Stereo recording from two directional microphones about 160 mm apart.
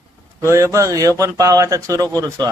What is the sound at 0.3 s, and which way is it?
Speech, 20° right (ahead or behind).